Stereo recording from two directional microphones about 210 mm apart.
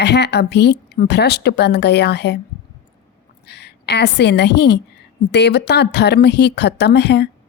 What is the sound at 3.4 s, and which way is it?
A woman's voice, 50° left (ahead or behind).